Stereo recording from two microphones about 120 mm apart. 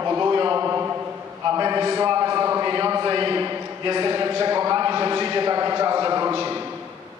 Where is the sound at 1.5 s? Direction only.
35° right (ahead or behind).